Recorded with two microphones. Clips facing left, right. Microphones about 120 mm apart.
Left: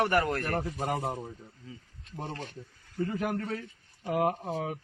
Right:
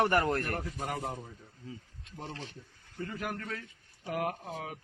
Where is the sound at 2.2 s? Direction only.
50° left (ahead or behind).